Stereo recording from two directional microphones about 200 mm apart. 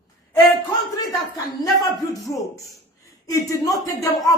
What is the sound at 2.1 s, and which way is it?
Speech, 15° left (ahead or behind).